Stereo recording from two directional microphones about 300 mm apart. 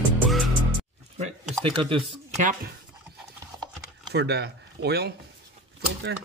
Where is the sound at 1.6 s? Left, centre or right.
Centre.